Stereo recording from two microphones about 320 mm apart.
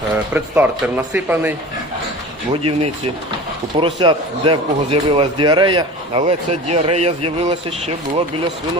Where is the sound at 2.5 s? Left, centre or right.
Centre.